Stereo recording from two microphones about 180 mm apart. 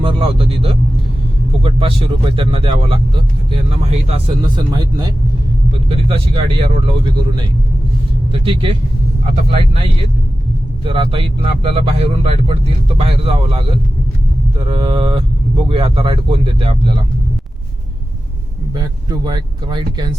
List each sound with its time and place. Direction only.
0.0 s speech: 30° right (ahead or behind)
10.8 s speech: 30° right (ahead or behind)
18.7 s speech: 25° right (ahead or behind)